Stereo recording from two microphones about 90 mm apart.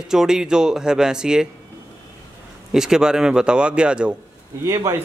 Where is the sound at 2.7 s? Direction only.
5° right (ahead or behind).